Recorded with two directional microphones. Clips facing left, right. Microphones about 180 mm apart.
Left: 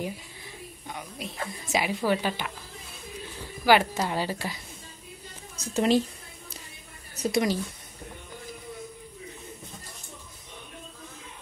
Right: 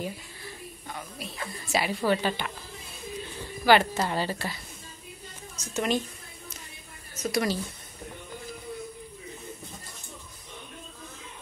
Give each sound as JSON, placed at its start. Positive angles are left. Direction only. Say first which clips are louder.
{"t": 0.8, "sound": "a woman's voice", "louder": "left 2 dB", "side_deg": 15}
{"t": 1.9, "sound": "a woman's voice", "louder": "right 1 dB", "side_deg": 5}
{"t": 3.6, "sound": "a woman's voice", "louder": "even", "side_deg": 10}
{"t": 5.6, "sound": "speech", "louder": "left 5 dB", "side_deg": 35}
{"t": 7.2, "sound": "speech", "louder": "left 2 dB", "side_deg": 25}